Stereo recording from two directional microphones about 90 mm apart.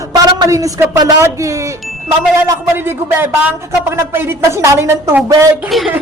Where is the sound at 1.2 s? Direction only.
35° right (ahead or behind).